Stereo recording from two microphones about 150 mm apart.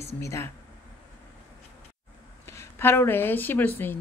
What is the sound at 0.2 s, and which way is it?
Speech, 20° left (ahead or behind).